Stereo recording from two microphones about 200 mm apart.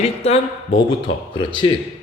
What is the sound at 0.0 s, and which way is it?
Speech, 30° left (ahead or behind).